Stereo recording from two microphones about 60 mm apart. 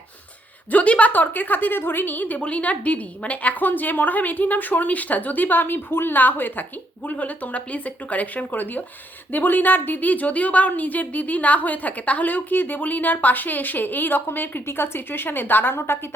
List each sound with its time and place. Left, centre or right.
0.7 s a woman's voice: left